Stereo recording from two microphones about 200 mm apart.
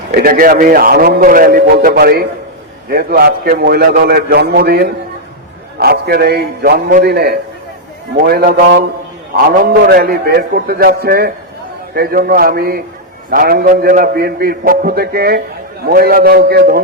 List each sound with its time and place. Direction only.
0.1 s a man's voice: 45° right (ahead or behind)